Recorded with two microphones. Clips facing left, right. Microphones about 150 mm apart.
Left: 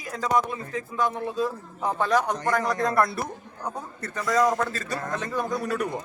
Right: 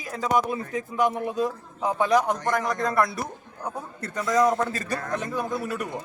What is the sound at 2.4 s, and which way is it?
A man's voice, 5° left (ahead or behind).